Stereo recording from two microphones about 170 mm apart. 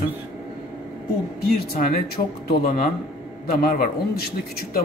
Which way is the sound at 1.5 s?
60° left (ahead or behind).